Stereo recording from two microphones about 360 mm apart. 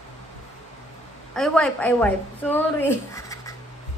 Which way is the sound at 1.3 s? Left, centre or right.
Centre.